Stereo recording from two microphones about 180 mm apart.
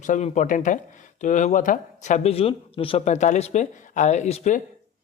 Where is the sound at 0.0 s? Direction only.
40° left (ahead or behind).